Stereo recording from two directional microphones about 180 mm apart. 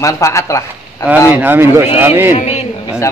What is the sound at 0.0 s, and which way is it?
Speech, 15° left (ahead or behind).